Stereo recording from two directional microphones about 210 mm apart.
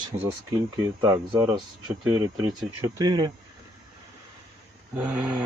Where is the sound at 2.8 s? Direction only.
20° right (ahead or behind).